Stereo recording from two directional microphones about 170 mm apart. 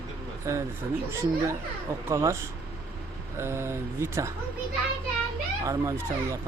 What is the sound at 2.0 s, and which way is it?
Speech, 15° right (ahead or behind).